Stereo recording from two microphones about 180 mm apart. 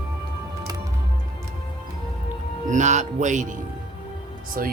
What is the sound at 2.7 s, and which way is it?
Speech, 40° right (ahead or behind).